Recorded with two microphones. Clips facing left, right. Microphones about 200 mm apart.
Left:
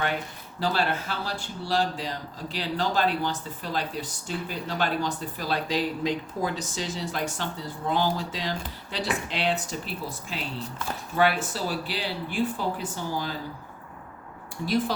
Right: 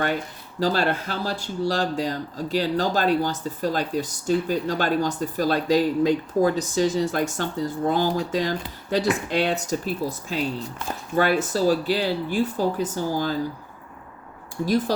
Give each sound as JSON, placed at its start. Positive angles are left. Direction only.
{"t": 0.6, "sound": "speech", "side_deg": -40}
{"t": 14.6, "sound": "speech", "side_deg": -40}